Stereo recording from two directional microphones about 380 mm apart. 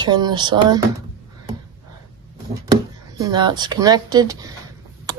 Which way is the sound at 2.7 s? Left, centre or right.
Centre.